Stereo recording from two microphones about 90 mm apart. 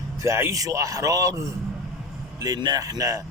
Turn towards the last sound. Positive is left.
turn(degrees=-40)  # may be behind; listen again after turning